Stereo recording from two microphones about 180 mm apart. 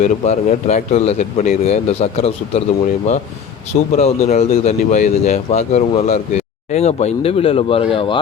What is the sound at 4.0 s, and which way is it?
Speech, 35° left (ahead or behind).